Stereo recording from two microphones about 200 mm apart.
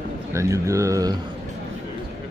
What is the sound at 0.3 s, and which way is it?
Speech, 15° right (ahead or behind).